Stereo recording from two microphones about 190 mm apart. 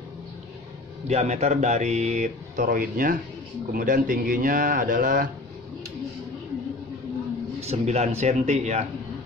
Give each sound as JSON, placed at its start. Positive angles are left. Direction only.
{"t": 1.0, "sound": "a man's voice", "side_deg": -35}
{"t": 7.6, "sound": "speech", "side_deg": -35}